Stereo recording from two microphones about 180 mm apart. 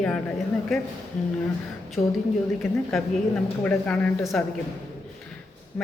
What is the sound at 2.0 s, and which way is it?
Speech, 20° left (ahead or behind).